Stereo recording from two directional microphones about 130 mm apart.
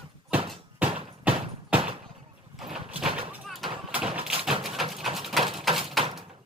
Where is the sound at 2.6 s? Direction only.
5° right (ahead or behind).